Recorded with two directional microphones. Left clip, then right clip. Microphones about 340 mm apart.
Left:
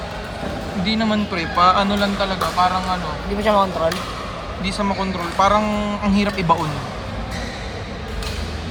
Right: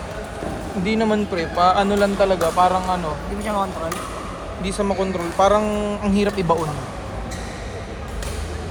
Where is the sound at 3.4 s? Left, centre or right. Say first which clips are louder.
Left 7 dB; left.